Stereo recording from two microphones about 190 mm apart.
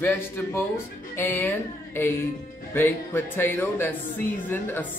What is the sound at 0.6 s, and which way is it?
Speech, 10° left (ahead or behind).